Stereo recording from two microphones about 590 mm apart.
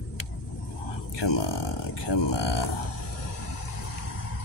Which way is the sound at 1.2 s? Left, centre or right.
Left.